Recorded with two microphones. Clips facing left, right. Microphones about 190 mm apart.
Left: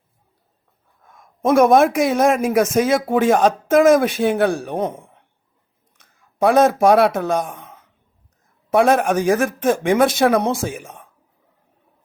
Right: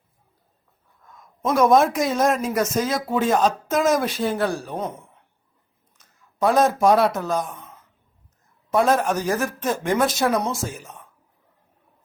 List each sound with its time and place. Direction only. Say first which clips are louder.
1.0 s a sound: left 6 dB; 50° left (ahead or behind)
1.5 s speech: left 4 dB; 65° left (ahead or behind); by 7.7 s 80° left
8.7 s speech: left 4 dB; 70° left (ahead or behind)